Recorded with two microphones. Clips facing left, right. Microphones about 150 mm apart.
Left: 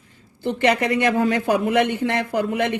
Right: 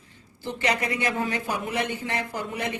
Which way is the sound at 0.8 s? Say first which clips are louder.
Left 8 dB; 60° left (ahead or behind).